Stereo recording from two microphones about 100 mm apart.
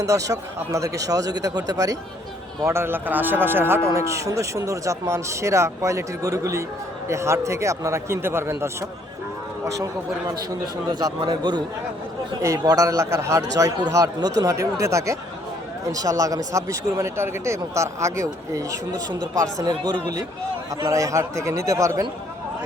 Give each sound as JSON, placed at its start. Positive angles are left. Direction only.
{"t": 0.0, "sound": "speech", "side_deg": -35}
{"t": 2.6, "sound": "a man's voice", "side_deg": -25}
{"t": 9.7, "sound": "speech", "side_deg": -35}
{"t": 11.2, "sound": "a man's voice", "side_deg": -50}
{"t": 12.5, "sound": "speech", "side_deg": -40}
{"t": 20.8, "sound": "speech", "side_deg": -30}